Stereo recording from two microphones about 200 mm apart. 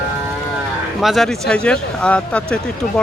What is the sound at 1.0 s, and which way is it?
Speech, centre (ahead or behind).